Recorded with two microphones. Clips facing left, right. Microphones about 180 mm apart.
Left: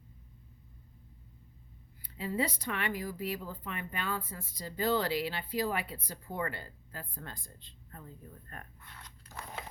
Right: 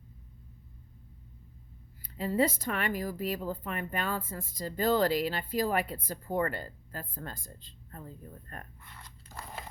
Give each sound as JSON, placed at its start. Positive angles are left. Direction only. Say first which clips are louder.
{"t": 2.0, "sound": "speech", "louder": "right 5 dB", "side_deg": -45}